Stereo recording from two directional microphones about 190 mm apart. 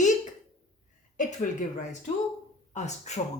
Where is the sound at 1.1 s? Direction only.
40° left (ahead or behind).